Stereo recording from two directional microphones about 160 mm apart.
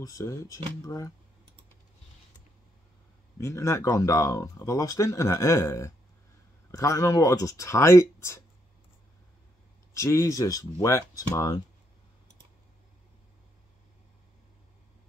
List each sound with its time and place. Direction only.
0.0 s speech: 20° left (ahead or behind)
3.3 s speech: 15° left (ahead or behind)
9.9 s speech: 20° left (ahead or behind)